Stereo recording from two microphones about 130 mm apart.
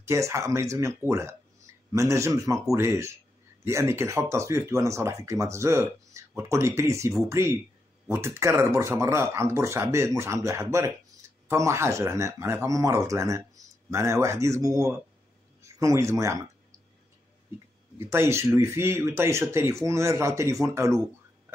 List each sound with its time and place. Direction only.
0.0 s a man's voice: 20° right (ahead or behind)
17.9 s speech: 20° right (ahead or behind)